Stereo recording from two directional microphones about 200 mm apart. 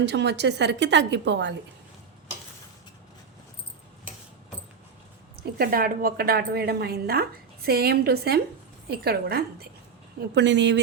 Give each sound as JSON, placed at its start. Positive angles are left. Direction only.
{"t": 0.0, "sound": "a woman's voice", "side_deg": -55}
{"t": 5.4, "sound": "a woman's voice", "side_deg": -50}
{"t": 10.2, "sound": "a woman's voice", "side_deg": -60}